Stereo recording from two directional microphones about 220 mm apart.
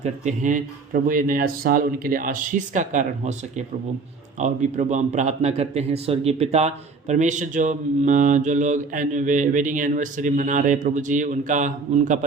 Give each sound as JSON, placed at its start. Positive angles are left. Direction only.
{"t": 0.0, "sound": "a man's voice", "side_deg": -35}
{"t": 4.4, "sound": "a man's voice", "side_deg": -30}